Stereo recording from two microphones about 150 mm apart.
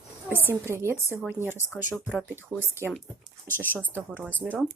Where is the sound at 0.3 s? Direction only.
15° right (ahead or behind).